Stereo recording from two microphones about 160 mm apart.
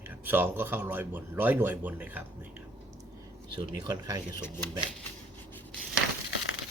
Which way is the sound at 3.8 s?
25° right (ahead or behind).